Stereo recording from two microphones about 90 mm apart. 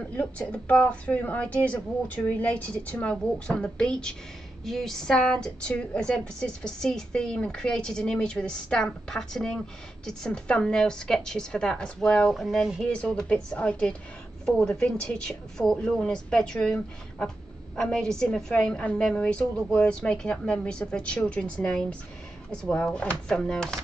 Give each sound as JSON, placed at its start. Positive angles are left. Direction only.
{"t": 0.0, "sound": "a woman's voice", "side_deg": 15}
{"t": 12.8, "sound": "a woman's voice", "side_deg": 10}